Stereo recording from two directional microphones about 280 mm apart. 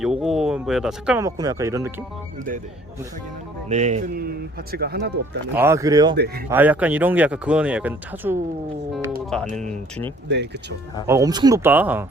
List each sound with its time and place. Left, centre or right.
0.0 s speech: centre
3.7 s speech: right
5.5 s speech: centre
6.1 s speech: right
6.5 s speech: centre
10.2 s speech: right
11.0 s speech: centre